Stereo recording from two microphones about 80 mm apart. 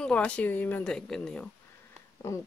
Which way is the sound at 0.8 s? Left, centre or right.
Centre.